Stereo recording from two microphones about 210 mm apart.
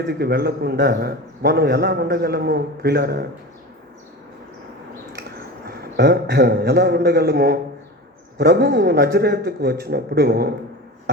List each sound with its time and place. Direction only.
0.0 s a man's voice: 50° right (ahead or behind)
5.6 s a man's voice: 50° right (ahead or behind)